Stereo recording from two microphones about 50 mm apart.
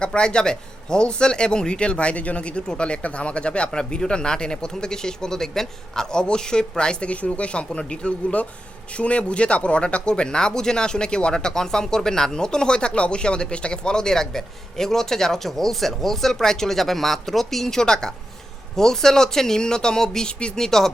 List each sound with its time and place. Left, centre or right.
0.0 s speech: centre